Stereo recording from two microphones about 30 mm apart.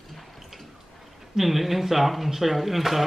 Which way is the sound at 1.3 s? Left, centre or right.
Centre.